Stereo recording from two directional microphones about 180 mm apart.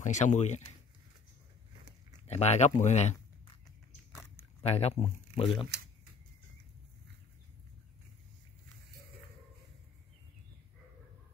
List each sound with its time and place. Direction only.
0.0 s speech: 40° left (ahead or behind)
2.2 s speech: 35° left (ahead or behind)
4.6 s speech: 35° left (ahead or behind)